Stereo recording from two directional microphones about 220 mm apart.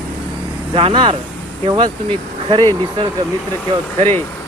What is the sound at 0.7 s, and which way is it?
Speech, 25° right (ahead or behind).